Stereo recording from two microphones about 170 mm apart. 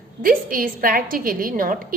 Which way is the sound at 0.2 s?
55° right (ahead or behind).